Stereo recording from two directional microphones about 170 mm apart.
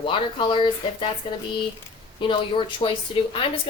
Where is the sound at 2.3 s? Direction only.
30° left (ahead or behind).